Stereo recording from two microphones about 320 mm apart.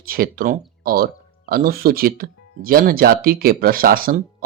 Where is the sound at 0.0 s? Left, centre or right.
Right.